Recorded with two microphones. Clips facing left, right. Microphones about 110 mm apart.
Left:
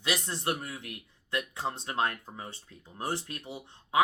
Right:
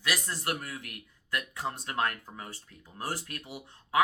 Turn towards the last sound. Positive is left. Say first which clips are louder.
# even
turn(degrees=25)  # may be behind; listen again after turning